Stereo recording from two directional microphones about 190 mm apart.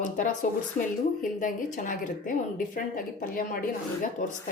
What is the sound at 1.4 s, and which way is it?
Speech, 40° left (ahead or behind).